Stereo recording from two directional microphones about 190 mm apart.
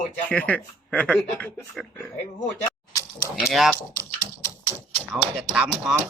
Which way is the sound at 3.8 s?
15° left (ahead or behind).